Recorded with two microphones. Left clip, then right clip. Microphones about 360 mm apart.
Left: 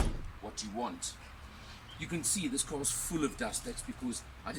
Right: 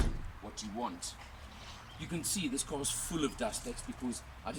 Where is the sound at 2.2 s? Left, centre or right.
Centre.